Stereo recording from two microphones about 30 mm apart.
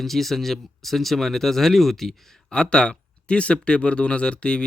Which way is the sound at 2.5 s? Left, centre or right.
Left.